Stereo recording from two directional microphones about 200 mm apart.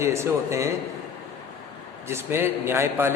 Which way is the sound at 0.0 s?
15° right (ahead or behind).